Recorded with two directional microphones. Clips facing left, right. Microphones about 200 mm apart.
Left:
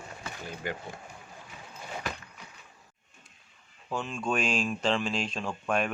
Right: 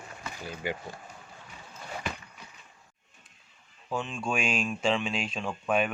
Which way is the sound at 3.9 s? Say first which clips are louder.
Even; centre (ahead or behind).